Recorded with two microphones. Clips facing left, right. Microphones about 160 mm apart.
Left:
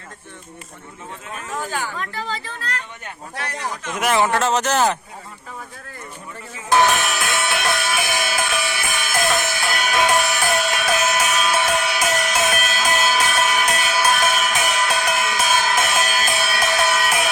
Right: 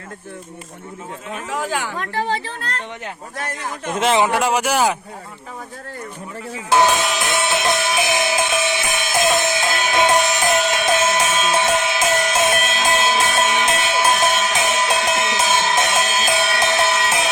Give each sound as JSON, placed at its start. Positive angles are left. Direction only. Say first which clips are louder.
{"t": 1.3, "sound": "speech", "louder": "right 4 dB", "side_deg": -75}
{"t": 1.9, "sound": "speech", "louder": "right 5 dB", "side_deg": -45}
{"t": 3.9, "sound": "speech", "louder": "right 2 dB", "side_deg": -20}
{"t": 6.7, "sound": "music", "louder": "right 1 dB", "side_deg": -15}